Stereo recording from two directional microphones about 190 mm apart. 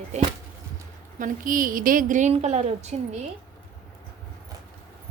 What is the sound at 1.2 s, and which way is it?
A woman's voice, 45° right (ahead or behind).